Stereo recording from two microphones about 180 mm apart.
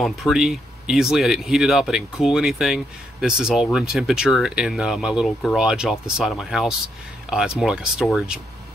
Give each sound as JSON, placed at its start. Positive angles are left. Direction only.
{"t": 0.0, "sound": "speech", "side_deg": 0}